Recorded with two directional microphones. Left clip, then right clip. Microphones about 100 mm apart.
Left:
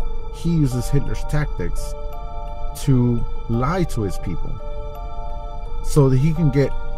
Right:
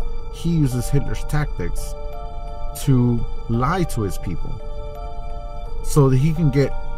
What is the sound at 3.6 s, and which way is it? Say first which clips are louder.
Speech: right 1 dB; 15° right (ahead or behind).